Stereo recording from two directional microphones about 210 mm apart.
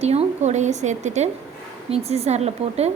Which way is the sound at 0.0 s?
30° right (ahead or behind).